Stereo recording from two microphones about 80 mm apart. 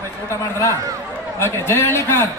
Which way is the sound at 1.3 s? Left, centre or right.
Left.